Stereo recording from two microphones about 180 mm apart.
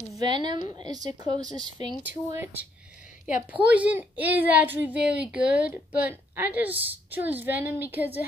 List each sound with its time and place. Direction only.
0.2 s a woman's voice: 25° right (ahead or behind)
2.3 s a woman's voice: 10° right (ahead or behind)